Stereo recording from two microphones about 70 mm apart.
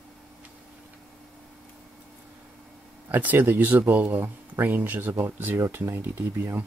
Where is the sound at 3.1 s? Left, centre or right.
Right.